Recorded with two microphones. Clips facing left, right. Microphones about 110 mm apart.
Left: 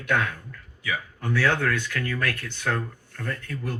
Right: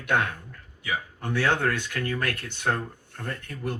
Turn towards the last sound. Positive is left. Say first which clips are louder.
# left 1 dB
turn(degrees=-20)  # may be behind; listen again after turning